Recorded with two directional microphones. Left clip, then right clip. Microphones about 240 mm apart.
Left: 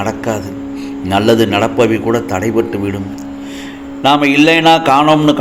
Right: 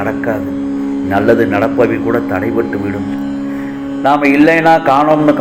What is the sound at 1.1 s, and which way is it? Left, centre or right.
A man's voice, left.